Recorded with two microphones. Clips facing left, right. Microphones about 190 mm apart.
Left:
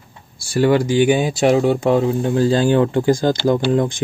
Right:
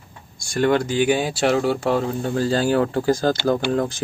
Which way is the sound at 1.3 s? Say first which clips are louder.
Left 4 dB; centre (ahead or behind).